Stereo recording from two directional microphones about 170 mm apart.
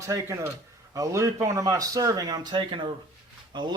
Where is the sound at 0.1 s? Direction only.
15° right (ahead or behind).